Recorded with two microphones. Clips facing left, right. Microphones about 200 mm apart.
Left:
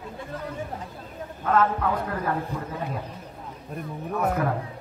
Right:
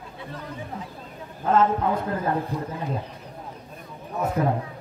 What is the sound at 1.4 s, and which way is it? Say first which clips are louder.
Speech: right 2 dB; 25° right (ahead or behind).